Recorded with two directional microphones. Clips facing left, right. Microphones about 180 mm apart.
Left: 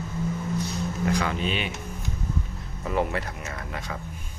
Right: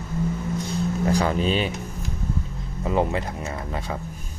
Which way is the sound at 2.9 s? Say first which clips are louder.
Right 3 dB; 25° right (ahead or behind).